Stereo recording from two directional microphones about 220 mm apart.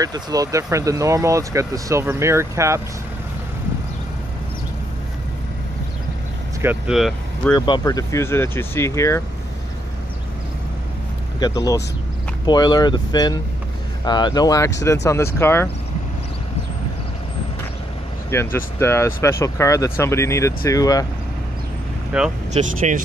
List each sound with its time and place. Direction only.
0.0 s speech: 15° right (ahead or behind)
6.6 s speech: 5° right (ahead or behind)
7.5 s speech: 20° left (ahead or behind)
11.3 s speech: 15° left (ahead or behind)
18.3 s speech: 10° left (ahead or behind)
22.1 s speech: 5° right (ahead or behind)
22.8 s speech: 30° right (ahead or behind)